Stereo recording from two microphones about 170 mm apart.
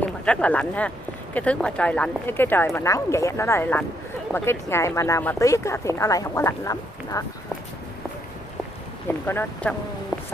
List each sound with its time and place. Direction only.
0.0 s speech: 5° left (ahead or behind)
9.3 s speech: 10° left (ahead or behind)